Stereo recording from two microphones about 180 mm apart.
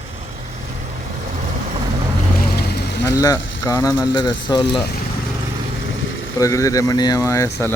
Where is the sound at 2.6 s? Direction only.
65° left (ahead or behind).